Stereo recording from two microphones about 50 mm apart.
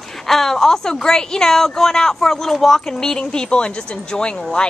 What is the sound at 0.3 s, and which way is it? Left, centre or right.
A woman's voice, centre.